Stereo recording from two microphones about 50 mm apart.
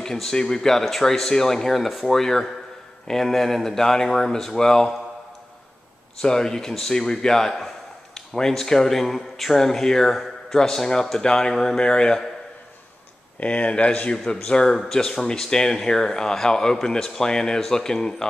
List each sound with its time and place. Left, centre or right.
0.0 s a man's voice: centre
6.2 s a man's voice: centre
13.4 s a man's voice: left